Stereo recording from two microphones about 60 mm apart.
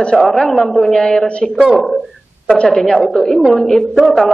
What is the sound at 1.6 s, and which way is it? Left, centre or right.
A woman's voice, centre.